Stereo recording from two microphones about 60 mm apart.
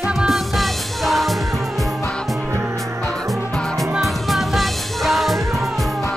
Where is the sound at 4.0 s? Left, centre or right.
Centre.